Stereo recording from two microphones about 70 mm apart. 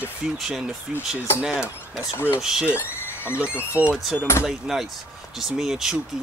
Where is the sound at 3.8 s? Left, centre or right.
Right.